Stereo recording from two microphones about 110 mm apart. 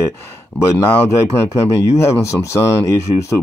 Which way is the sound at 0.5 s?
25° left (ahead or behind).